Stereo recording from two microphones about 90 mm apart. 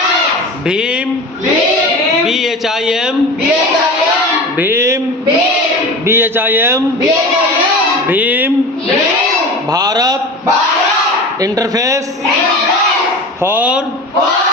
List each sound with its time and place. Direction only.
2.2 s speech: centre (ahead or behind)
4.5 s a man's voice: 25° right (ahead or behind)
6.1 s a man's voice: 25° right (ahead or behind)
8.0 s a man's voice: 20° right (ahead or behind)
9.7 s a man's voice: 45° right (ahead or behind)
13.4 s speech: 20° right (ahead or behind)